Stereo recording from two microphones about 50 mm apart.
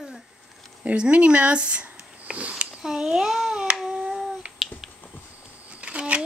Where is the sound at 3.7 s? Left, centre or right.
Centre.